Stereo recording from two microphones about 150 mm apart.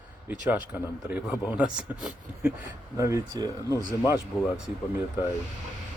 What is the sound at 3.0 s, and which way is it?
Speech, 20° right (ahead or behind).